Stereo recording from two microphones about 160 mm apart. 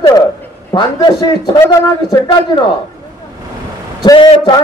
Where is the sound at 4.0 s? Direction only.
25° left (ahead or behind).